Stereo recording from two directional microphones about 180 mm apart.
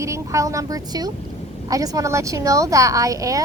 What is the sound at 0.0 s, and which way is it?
A woman's voice, 15° right (ahead or behind).